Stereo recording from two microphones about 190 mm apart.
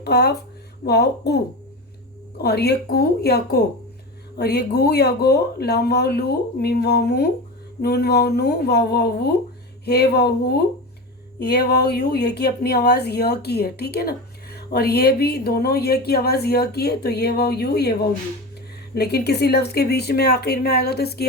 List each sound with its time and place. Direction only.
0.0 s speech: 60° left (ahead or behind)
2.4 s speech: 60° left (ahead or behind)
18.9 s speech: 60° left (ahead or behind)